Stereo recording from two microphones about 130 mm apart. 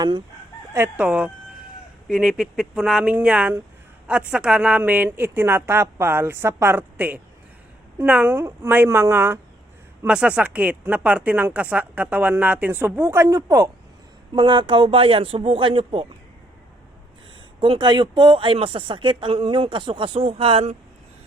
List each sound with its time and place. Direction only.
0.9 s speech: 10° right (ahead or behind)
10.1 s speech: 10° right (ahead or behind); by 13.7 s 25° right (ahead or behind)
14.3 s speech: 40° right (ahead or behind)
17.6 s speech: 40° right (ahead or behind)